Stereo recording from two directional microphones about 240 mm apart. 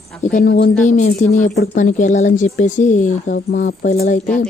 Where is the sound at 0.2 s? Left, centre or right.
Left.